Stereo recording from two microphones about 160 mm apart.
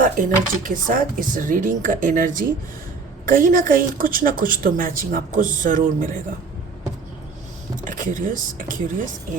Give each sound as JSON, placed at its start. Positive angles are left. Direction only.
{"t": 0.0, "sound": "a woman's voice", "side_deg": -55}
{"t": 7.9, "sound": "a woman's voice", "side_deg": -55}